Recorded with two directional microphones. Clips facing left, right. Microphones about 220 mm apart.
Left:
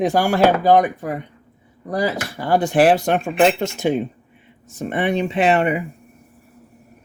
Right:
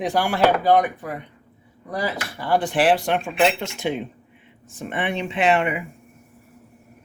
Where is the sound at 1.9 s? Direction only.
45° left (ahead or behind).